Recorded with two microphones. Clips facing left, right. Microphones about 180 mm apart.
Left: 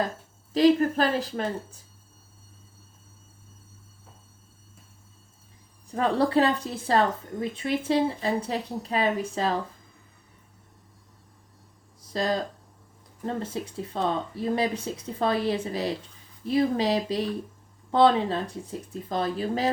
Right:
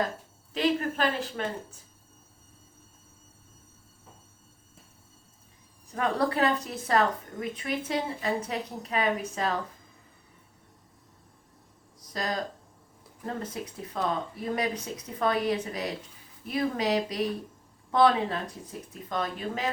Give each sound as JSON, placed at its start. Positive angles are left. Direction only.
{"t": 0.5, "sound": "speech", "side_deg": 35}
{"t": 5.9, "sound": "speech", "side_deg": 30}
{"t": 11.9, "sound": "a sound", "side_deg": 30}
{"t": 13.2, "sound": "speech", "side_deg": 30}